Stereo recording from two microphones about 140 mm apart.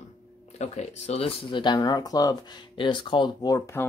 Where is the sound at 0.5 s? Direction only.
55° left (ahead or behind).